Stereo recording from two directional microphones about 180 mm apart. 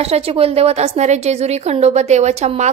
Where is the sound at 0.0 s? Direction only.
35° right (ahead or behind).